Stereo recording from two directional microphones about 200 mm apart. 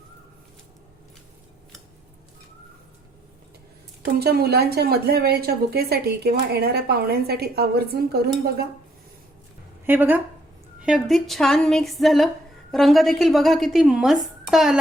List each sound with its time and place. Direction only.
4.0 s a woman's voice: 50° right (ahead or behind)
9.8 s a woman's voice: 10° right (ahead or behind)